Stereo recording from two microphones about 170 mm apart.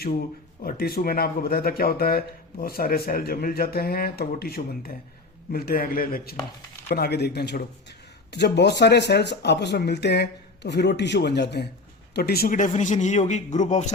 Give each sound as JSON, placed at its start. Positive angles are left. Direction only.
{"t": 0.6, "sound": "speech", "side_deg": 60}
{"t": 6.9, "sound": "speech", "side_deg": 70}
{"t": 12.1, "sound": "a man's voice", "side_deg": 65}